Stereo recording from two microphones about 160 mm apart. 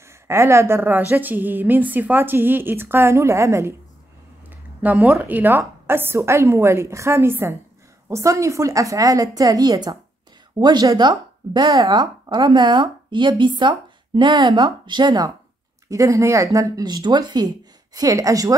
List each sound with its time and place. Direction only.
0.0 s a woman's voice: 15° right (ahead or behind)